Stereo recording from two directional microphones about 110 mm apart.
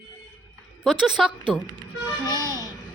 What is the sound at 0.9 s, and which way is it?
Speech, 5° right (ahead or behind).